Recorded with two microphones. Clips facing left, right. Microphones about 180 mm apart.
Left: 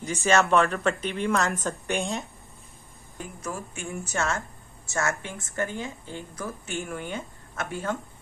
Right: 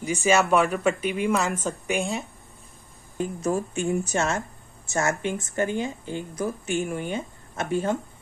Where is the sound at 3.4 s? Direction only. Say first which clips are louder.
Right 10 dB; 20° right (ahead or behind).